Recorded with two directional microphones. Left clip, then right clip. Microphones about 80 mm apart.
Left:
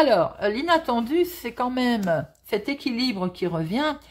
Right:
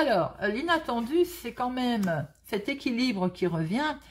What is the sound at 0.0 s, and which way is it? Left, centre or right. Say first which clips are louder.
Speech: left 6 dB; left.